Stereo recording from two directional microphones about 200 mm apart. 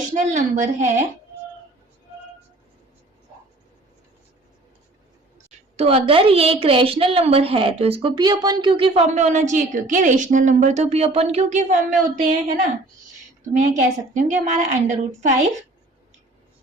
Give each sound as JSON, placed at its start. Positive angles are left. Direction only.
{"t": 0.0, "sound": "a woman's voice", "side_deg": -35}
{"t": 5.7, "sound": "a woman's voice", "side_deg": -30}
{"t": 13.5, "sound": "a woman's voice", "side_deg": -35}